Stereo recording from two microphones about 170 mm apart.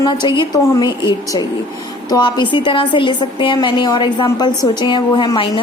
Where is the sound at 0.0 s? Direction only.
25° left (ahead or behind).